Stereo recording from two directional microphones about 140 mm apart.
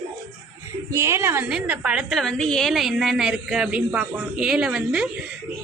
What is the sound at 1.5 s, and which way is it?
Speech, 5° right (ahead or behind).